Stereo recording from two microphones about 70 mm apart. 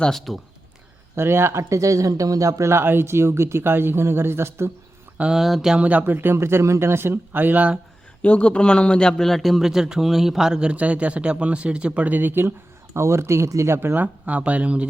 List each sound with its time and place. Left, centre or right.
0.0 s speech: centre
1.1 s speech: right
5.3 s speech: centre
5.7 s speech: right
8.2 s a man's voice: centre; by 14.0 s right
14.0 s speech: centre